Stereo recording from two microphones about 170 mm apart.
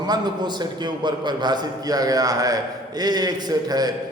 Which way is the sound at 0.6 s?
25° right (ahead or behind).